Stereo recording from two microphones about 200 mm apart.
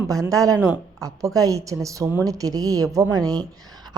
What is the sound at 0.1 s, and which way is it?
A woman's voice, 15° right (ahead or behind).